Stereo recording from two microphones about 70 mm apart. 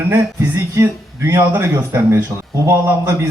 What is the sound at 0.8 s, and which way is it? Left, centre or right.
Speech, right.